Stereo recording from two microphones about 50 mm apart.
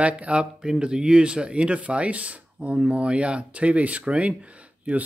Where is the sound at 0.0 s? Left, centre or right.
Right.